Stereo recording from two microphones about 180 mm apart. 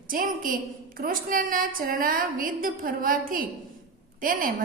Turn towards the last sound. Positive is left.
turn(degrees=-50)  # may be behind; listen again after turning